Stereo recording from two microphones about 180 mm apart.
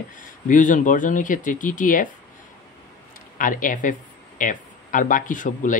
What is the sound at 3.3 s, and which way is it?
Speech, 50° left (ahead or behind).